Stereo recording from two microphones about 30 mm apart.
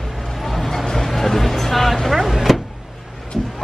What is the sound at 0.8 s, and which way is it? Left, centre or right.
Speech, centre.